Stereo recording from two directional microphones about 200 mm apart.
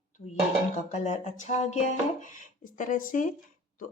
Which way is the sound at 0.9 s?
35° left (ahead or behind).